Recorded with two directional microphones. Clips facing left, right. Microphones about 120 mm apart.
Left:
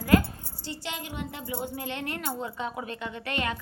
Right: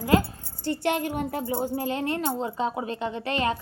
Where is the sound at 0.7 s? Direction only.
55° right (ahead or behind); by 3.6 s 30° right (ahead or behind).